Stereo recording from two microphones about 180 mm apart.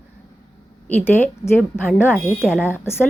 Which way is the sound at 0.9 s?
10° left (ahead or behind).